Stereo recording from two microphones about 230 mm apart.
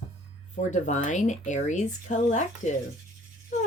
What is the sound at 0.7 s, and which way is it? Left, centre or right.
Speech, left.